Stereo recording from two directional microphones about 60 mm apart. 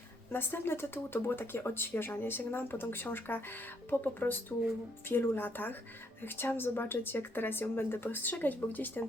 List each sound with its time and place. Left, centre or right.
0.3 s speech: left